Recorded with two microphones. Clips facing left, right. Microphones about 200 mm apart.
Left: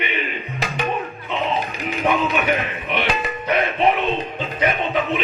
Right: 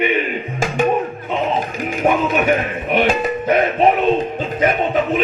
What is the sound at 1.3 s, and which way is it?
Music, 45° right (ahead or behind).